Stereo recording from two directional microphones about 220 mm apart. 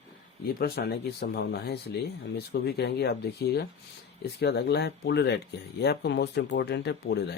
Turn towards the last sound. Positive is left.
turn(degrees=50)  # may be behind; listen again after turning